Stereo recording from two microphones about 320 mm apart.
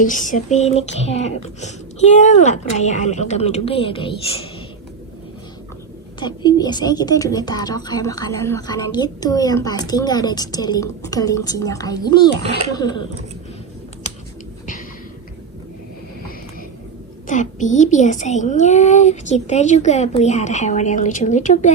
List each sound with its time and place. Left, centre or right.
0.0 s speech: left
6.1 s speech: centre
17.2 s speech: left